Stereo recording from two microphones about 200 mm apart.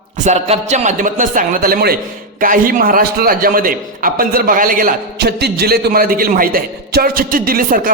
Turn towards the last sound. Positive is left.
turn(degrees=-45)  # may be behind; listen again after turning